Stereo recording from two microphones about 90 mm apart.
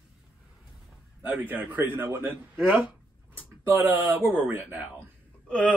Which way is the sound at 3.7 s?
20° right (ahead or behind).